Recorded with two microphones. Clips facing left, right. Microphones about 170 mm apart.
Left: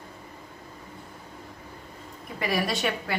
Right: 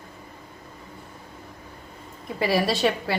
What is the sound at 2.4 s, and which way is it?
Speech, 30° right (ahead or behind).